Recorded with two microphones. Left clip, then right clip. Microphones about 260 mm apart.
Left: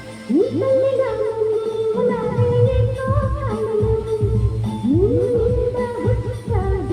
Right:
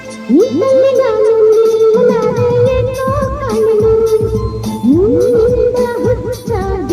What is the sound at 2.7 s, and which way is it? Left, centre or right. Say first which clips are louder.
Music: right 9 dB; right.